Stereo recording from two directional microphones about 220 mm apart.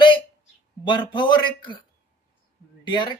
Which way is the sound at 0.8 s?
20° left (ahead or behind).